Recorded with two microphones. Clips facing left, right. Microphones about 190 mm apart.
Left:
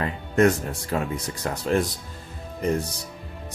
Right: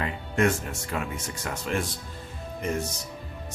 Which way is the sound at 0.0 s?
40° left (ahead or behind).